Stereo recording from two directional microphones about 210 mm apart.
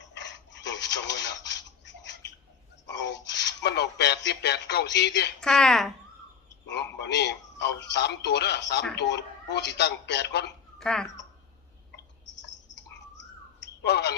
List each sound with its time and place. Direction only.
0.0 s a sound: 55° left (ahead or behind)
2.8 s speech: 55° left (ahead or behind)
5.4 s speech: 5° left (ahead or behind)
6.7 s speech: 55° left (ahead or behind)
10.8 s speech: 5° left (ahead or behind)
12.2 s clicking: 55° left (ahead or behind)